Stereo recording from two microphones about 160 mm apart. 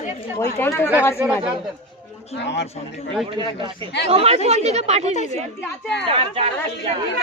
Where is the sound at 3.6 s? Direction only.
30° right (ahead or behind).